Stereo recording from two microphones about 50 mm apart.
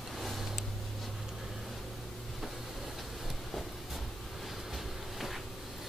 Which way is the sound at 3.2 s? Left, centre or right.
Centre.